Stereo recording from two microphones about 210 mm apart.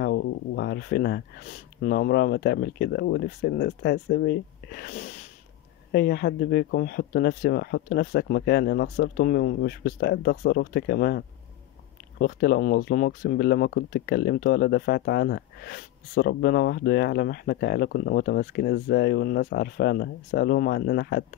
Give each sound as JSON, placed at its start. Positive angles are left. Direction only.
{"t": 0.0, "sound": "speech", "side_deg": 55}